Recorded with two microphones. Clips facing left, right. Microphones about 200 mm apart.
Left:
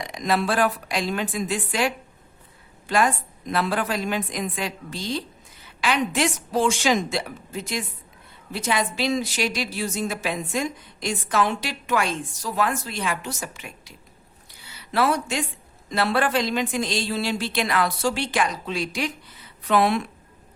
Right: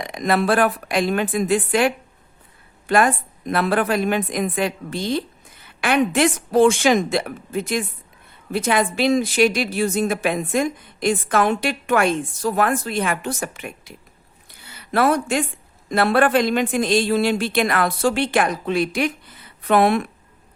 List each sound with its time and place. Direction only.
0.0 s a woman's voice: 55° right (ahead or behind)
14.5 s a sound: 50° right (ahead or behind)
15.9 s a woman's voice: 55° right (ahead or behind)